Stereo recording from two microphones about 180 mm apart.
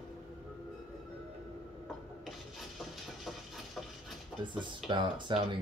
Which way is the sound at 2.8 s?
Centre (ahead or behind).